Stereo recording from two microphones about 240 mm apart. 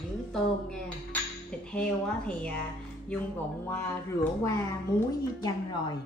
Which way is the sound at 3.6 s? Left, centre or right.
Centre.